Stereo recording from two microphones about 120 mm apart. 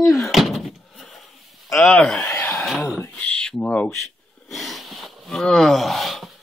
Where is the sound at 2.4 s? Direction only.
5° left (ahead or behind).